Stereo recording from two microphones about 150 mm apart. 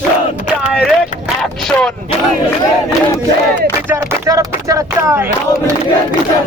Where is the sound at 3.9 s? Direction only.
20° right (ahead or behind).